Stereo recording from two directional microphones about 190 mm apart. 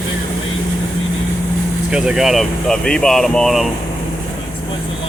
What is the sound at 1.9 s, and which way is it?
Speech, 5° right (ahead or behind).